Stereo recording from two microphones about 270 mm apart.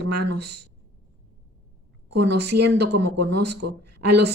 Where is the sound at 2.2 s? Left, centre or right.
Right.